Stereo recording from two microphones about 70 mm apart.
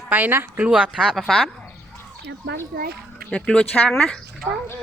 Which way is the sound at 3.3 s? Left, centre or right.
Centre.